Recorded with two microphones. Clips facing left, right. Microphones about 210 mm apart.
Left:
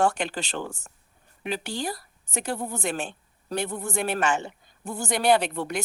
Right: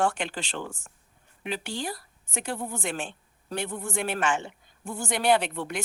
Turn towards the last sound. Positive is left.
turn(degrees=40)  # may be behind; listen again after turning